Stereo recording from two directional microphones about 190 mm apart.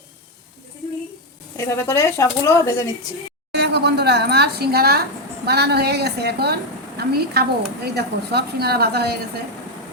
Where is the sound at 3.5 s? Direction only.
65° right (ahead or behind).